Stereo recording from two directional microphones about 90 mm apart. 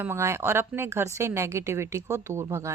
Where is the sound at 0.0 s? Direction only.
30° right (ahead or behind).